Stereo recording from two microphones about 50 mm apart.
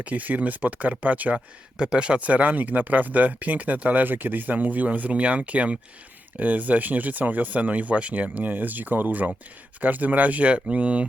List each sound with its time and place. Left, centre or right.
0.0 s speech: right
1.8 s speech: centre